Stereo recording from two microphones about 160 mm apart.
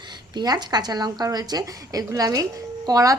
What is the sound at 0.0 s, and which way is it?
Speech, 25° right (ahead or behind).